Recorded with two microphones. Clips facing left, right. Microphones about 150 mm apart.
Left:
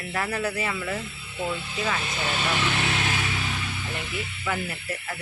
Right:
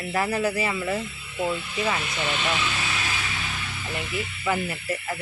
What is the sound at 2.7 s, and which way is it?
Speech, 65° left (ahead or behind).